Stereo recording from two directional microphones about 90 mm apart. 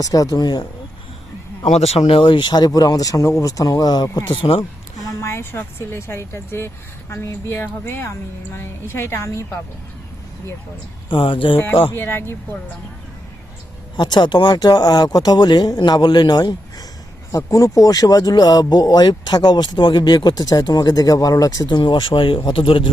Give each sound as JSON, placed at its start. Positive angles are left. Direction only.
{"t": 0.0, "sound": "speech", "side_deg": 40}
{"t": 2.0, "sound": "speech", "side_deg": 80}
{"t": 4.4, "sound": "speech", "side_deg": 65}
{"t": 5.2, "sound": "a woman's voice", "side_deg": 30}
{"t": 11.1, "sound": "speech", "side_deg": 65}
{"t": 11.5, "sound": "a woman's voice", "side_deg": 20}
{"t": 13.9, "sound": "speech", "side_deg": 55}
{"t": 17.3, "sound": "speech", "side_deg": 40}
{"t": 21.8, "sound": "speech", "side_deg": 60}